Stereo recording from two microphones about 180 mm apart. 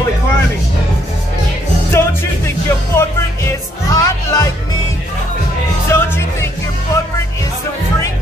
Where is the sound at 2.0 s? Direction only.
15° left (ahead or behind).